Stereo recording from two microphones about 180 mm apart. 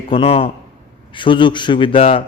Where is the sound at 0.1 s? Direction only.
30° left (ahead or behind).